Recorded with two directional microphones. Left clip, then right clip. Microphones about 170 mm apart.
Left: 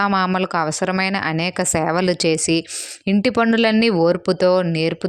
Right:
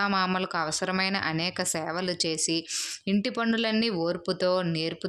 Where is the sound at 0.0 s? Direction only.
45° left (ahead or behind).